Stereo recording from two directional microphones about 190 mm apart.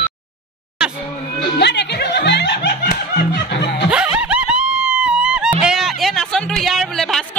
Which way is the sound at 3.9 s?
5° right (ahead or behind).